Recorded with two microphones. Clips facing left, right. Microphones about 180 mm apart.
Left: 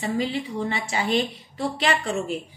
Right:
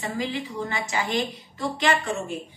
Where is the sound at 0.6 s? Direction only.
30° left (ahead or behind).